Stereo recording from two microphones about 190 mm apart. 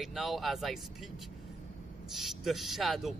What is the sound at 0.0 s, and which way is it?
A man's voice, centre (ahead or behind).